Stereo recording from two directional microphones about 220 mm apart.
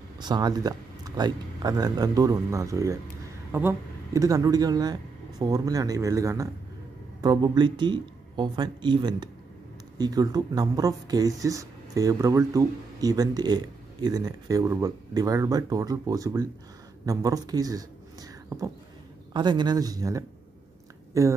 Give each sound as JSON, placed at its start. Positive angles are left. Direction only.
{"t": 0.2, "sound": "speech", "side_deg": -20}